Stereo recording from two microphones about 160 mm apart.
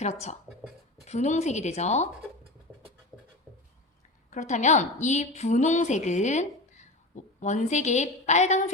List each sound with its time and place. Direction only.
0.0 s a woman's voice: 45° left (ahead or behind)
4.3 s a woman's voice: 50° left (ahead or behind)